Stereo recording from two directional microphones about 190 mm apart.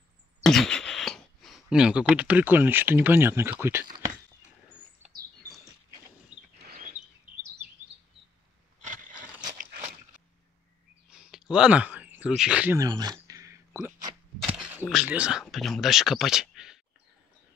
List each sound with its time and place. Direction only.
0.4 s speech: centre (ahead or behind)
6.7 s bird: 45° right (ahead or behind)
11.1 s a sound: 5° right (ahead or behind)
12.7 s speech: 20° right (ahead or behind); by 16.8 s 5° right (ahead or behind)